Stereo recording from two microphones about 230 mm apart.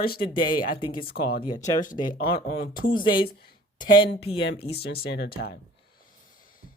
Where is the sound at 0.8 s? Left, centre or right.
Left.